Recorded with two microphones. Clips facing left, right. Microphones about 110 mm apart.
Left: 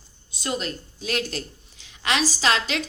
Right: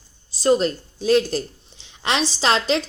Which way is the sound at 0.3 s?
35° right (ahead or behind).